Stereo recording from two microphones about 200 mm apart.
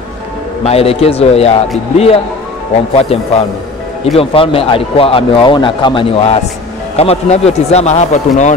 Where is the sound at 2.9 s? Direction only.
30° left (ahead or behind).